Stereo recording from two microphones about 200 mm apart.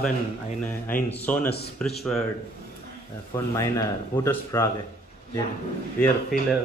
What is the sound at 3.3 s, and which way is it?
Speech, 15° left (ahead or behind).